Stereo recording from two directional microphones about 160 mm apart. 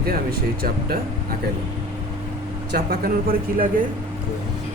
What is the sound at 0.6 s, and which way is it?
Speech, 70° right (ahead or behind).